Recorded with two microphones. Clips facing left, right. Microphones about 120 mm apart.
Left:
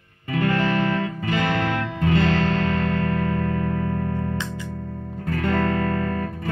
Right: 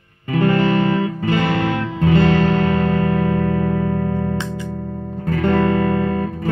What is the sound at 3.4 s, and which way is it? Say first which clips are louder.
Music: right 5 dB; 85° right.